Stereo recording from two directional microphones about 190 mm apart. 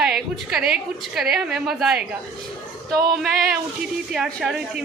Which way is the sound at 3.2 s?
Centre (ahead or behind).